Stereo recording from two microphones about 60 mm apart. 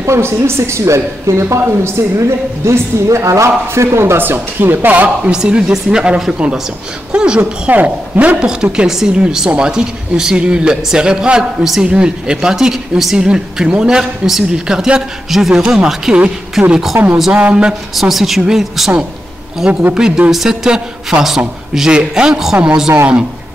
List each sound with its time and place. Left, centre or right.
0.0 s speech: right
4.2 s speech: right
5.3 s speech: centre
17.0 s speech: right
17.3 s speech: right
17.9 s a woman's voice: centre
19.9 s speech: centre